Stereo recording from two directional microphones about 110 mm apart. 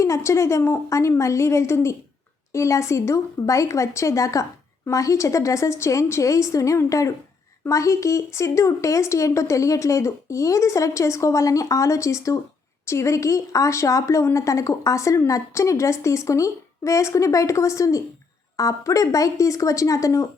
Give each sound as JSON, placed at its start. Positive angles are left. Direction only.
{"t": 0.0, "sound": "a woman's voice", "side_deg": 25}